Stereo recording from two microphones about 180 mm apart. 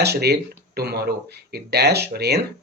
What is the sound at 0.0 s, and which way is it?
Speech, 65° right (ahead or behind).